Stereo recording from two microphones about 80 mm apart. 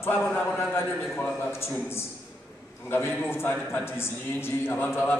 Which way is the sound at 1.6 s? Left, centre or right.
Left.